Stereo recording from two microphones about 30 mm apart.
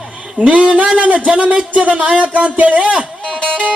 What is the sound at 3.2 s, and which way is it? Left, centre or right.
Music, left.